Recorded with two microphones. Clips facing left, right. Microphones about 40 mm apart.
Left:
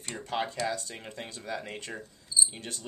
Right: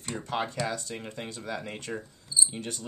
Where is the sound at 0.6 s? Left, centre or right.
Right.